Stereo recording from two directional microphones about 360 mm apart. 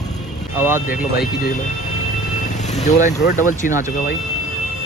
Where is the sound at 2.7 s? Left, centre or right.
Centre.